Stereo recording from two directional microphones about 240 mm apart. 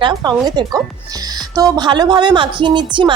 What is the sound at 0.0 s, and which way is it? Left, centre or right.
Speech, centre.